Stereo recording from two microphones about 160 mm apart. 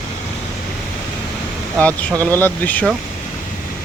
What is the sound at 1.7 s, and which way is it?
Speech, 5° left (ahead or behind).